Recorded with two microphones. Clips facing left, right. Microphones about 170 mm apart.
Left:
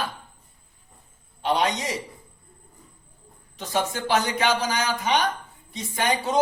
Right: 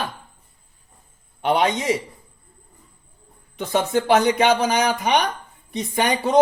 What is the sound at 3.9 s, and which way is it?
A man's voice, 60° right (ahead or behind).